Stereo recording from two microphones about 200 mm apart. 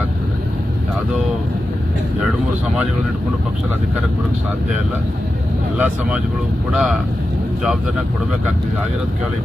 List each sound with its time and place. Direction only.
5.7 s speech: 10° right (ahead or behind)